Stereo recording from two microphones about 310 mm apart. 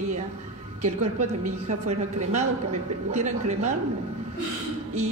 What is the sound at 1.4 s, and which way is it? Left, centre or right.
Speech, right.